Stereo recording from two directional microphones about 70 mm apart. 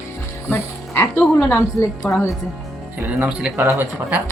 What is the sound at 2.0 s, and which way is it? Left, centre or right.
Speech, centre.